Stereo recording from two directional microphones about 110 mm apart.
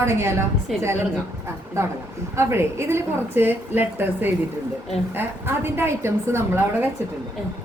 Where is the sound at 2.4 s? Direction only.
25° right (ahead or behind).